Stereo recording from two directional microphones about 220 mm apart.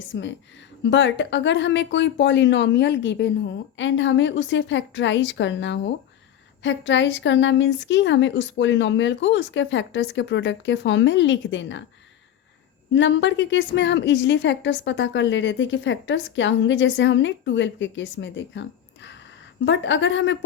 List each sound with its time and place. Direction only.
0.1 s a woman's voice: 55° left (ahead or behind)
12.9 s a woman's voice: 55° left (ahead or behind)